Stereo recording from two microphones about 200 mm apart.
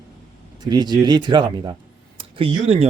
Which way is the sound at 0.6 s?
20° right (ahead or behind).